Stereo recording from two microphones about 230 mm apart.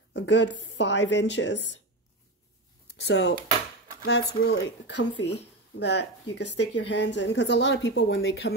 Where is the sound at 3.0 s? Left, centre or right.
Left.